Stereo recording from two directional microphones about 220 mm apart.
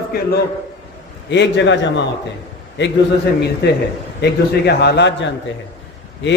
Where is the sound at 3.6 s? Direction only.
50° left (ahead or behind).